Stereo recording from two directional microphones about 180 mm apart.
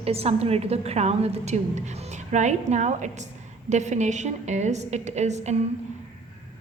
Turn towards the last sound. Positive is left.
turn(degrees=-40)  # may be behind; listen again after turning